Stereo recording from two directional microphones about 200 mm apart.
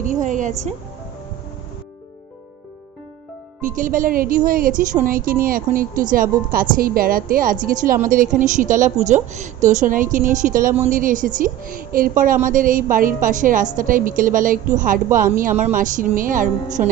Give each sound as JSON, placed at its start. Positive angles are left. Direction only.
{"t": 0.0, "sound": "a woman's voice", "side_deg": -40}
{"t": 3.6, "sound": "a woman's voice", "side_deg": -40}